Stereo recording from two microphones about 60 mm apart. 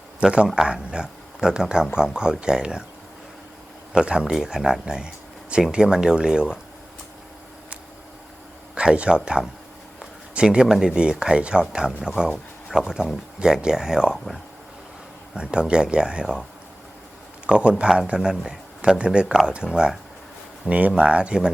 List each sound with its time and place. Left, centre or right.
0.2 s speech: centre
3.9 s speech: centre
8.7 s speech: centre
10.0 s a sound: centre
10.8 s speech: centre
15.4 s speech: centre
17.4 s speech: centre
19.6 s speech: centre
20.7 s speech: right